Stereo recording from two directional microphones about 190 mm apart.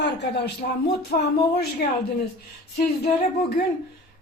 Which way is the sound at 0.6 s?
40° left (ahead or behind).